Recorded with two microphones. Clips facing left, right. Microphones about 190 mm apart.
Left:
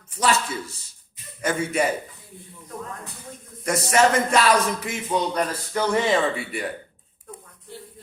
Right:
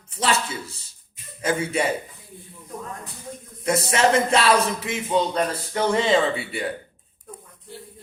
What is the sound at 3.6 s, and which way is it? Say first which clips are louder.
A man's voice: left 1 dB; 30° right (ahead or behind).